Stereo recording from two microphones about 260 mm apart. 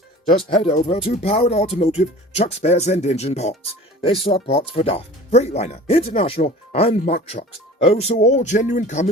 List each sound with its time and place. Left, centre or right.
0.3 s speech: centre